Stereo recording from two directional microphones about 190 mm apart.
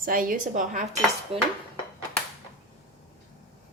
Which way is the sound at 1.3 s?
30° right (ahead or behind).